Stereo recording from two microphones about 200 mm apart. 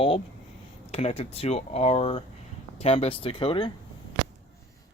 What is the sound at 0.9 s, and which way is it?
Speech, 30° left (ahead or behind).